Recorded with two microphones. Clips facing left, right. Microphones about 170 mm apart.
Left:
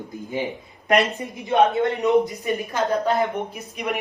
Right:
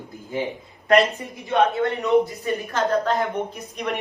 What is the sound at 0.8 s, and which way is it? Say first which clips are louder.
A man's voice: right 2 dB; 20° left (ahead or behind).